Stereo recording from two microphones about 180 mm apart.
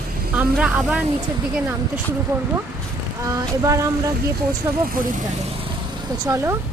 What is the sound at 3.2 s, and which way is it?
Speech, 20° right (ahead or behind).